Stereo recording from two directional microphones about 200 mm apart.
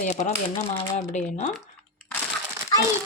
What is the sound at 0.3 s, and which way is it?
A woman's voice, 35° left (ahead or behind).